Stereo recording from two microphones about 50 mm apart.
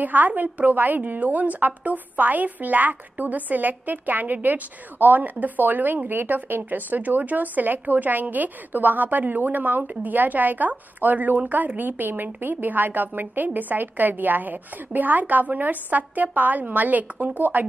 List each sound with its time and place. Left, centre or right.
0.0 s a woman's voice: right